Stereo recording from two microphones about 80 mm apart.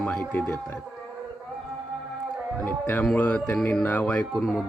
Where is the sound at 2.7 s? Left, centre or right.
Left.